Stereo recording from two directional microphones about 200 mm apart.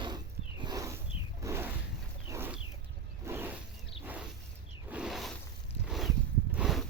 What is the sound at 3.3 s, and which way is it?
Zipper, 10° right (ahead or behind).